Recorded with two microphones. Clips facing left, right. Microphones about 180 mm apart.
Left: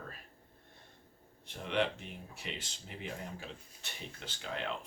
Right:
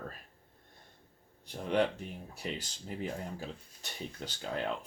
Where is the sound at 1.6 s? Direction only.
40° right (ahead or behind).